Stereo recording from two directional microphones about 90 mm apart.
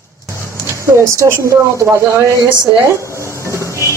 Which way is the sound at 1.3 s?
35° right (ahead or behind).